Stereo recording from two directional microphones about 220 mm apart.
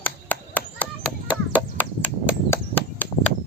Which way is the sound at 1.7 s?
10° left (ahead or behind).